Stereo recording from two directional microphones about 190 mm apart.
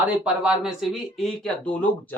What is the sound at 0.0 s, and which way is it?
Speech, 5° right (ahead or behind).